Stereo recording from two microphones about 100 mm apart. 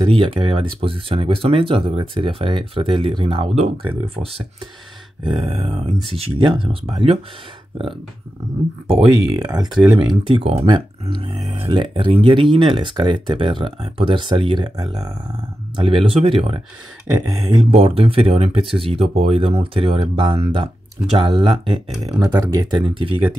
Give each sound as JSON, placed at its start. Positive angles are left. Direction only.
{"t": 0.0, "sound": "speech", "side_deg": -60}
{"t": 5.2, "sound": "speech", "side_deg": -55}
{"t": 6.1, "sound": "speech", "side_deg": -75}
{"t": 9.5, "sound": "speech", "side_deg": -40}
{"t": 10.0, "sound": "speech", "side_deg": -55}
{"t": 10.7, "sound": "speech", "side_deg": -55}
{"t": 17.1, "sound": "speech", "side_deg": -40}
{"t": 17.6, "sound": "speech", "side_deg": -80}
{"t": 22.2, "sound": "speech", "side_deg": -40}